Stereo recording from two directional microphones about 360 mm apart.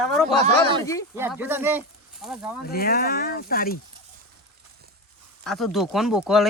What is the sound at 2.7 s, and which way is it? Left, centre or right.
Speech, left.